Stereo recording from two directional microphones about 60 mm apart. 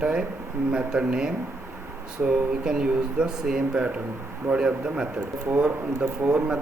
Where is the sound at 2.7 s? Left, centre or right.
Centre.